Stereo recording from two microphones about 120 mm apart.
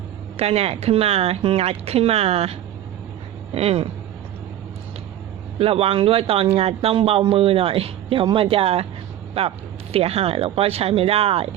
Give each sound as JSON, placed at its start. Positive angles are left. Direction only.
{"t": 0.3, "sound": "speech", "side_deg": -60}
{"t": 5.5, "sound": "a man's voice", "side_deg": -55}
{"t": 9.9, "sound": "a man's voice", "side_deg": -55}